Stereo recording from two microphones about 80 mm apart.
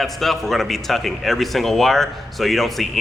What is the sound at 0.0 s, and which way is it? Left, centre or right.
Speech, centre.